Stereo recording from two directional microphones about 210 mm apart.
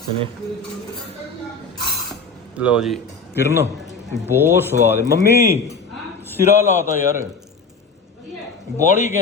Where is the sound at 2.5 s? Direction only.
5° right (ahead or behind).